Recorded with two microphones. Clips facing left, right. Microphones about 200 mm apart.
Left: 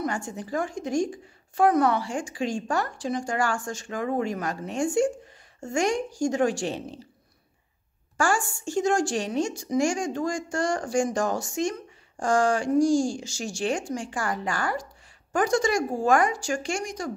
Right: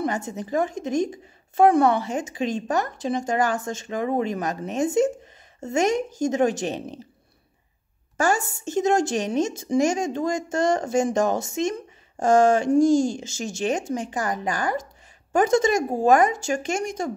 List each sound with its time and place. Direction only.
0.0 s a woman's voice: 20° right (ahead or behind)
8.2 s a woman's voice: 20° right (ahead or behind)